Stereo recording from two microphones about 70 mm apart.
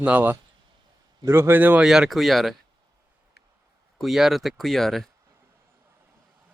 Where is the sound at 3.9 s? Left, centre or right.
Centre.